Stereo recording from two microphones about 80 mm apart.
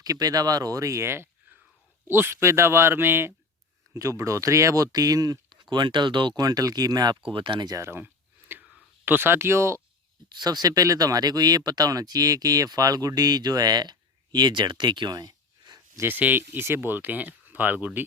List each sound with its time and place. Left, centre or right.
0.0 s speech: right
3.9 s speech: right
5.7 s speech: right
7.3 s speech: right
7.8 s a sound: right
9.0 s speech: right
10.2 s speech: right
16.0 s speech: right